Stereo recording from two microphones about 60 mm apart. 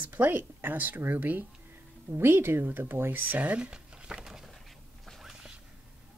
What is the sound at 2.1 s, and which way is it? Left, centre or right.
Speech, right.